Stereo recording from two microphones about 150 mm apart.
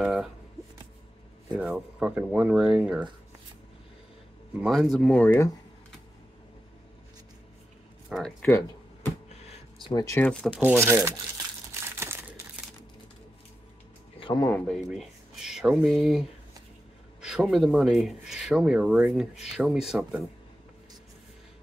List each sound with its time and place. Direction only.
0.0 s shuffling cards: 5° right (ahead or behind)
1.5 s speech: 5° right (ahead or behind)
4.6 s speech: centre (ahead or behind)
8.1 s speech: 5° left (ahead or behind)
9.8 s speech: 25° left (ahead or behind)
10.1 s speech: 10° left (ahead or behind)
10.6 s speech: 15° right (ahead or behind)
14.2 s speech: 30° left (ahead or behind)
14.9 s speech: 5° right (ahead or behind)